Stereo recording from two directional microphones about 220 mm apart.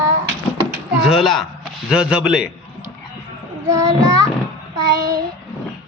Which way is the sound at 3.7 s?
15° right (ahead or behind).